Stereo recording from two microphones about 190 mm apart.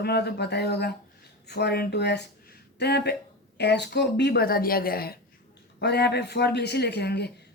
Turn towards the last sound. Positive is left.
turn(degrees=60)  # may be behind; listen again after turning